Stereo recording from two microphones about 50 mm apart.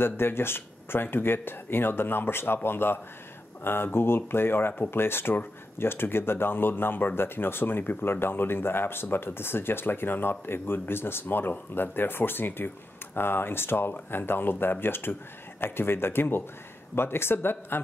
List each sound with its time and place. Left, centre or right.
0.0 s speech: left